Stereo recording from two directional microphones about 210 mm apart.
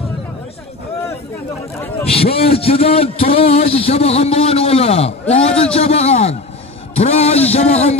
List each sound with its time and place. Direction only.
2.0 s a man's voice: 25° left (ahead or behind)